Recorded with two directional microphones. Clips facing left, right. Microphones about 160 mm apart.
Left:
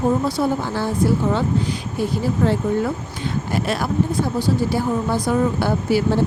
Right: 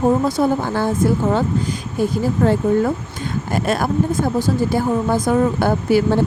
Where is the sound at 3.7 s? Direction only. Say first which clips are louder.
Right 4 dB; 50° right (ahead or behind).